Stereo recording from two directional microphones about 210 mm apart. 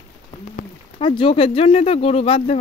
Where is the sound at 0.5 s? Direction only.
25° left (ahead or behind).